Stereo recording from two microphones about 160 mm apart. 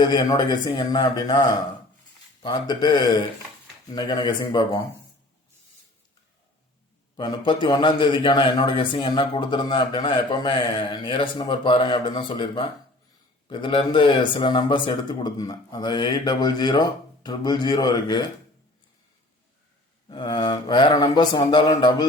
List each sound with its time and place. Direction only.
0.0 s speech: 25° left (ahead or behind)
7.2 s a man's voice: 30° left (ahead or behind)
20.1 s speech: 30° left (ahead or behind)